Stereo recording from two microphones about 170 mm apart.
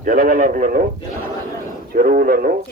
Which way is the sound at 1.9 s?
55° right (ahead or behind).